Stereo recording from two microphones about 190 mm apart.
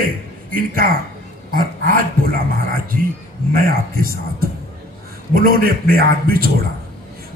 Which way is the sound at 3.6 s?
50° right (ahead or behind).